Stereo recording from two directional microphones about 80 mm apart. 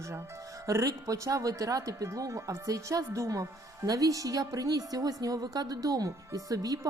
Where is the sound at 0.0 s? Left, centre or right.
Right.